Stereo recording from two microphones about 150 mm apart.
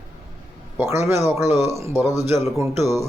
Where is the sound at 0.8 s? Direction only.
15° right (ahead or behind).